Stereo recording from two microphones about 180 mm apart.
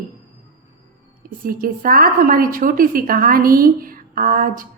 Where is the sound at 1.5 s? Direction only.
55° right (ahead or behind).